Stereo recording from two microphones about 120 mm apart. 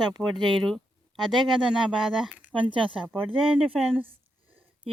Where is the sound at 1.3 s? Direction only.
Centre (ahead or behind).